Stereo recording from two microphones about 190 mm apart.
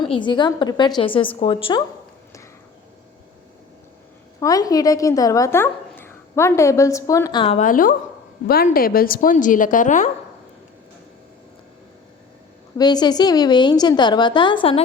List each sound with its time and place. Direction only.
0.0 s a woman's voice: 25° left (ahead or behind)
4.4 s a woman's voice: 20° left (ahead or behind)
7.6 s a woman's voice: 45° left (ahead or behind)
12.7 s a woman's voice: 20° left (ahead or behind)